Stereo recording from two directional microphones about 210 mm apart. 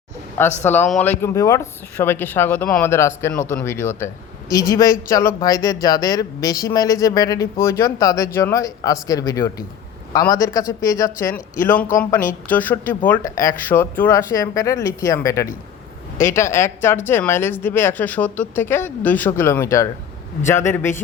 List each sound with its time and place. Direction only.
0.3 s speech: 10° left (ahead or behind)